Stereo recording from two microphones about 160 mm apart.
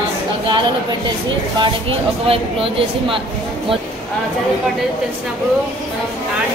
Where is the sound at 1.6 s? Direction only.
35° right (ahead or behind).